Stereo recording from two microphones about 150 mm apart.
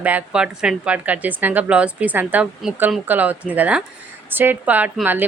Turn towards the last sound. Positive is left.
turn(degrees=-10)  # may be behind; listen again after turning